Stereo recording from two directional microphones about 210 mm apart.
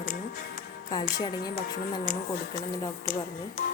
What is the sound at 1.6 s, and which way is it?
Speech, 45° left (ahead or behind).